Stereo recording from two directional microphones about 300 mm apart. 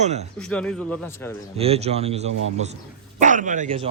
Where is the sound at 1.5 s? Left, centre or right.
Centre.